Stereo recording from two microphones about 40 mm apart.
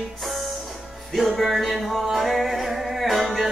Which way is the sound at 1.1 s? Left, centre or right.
Centre.